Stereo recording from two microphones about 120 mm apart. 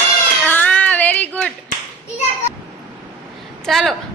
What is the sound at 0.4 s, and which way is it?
Child singing, 15° left (ahead or behind).